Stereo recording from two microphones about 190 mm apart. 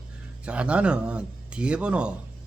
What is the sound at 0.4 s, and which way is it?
A man's voice, 5° right (ahead or behind).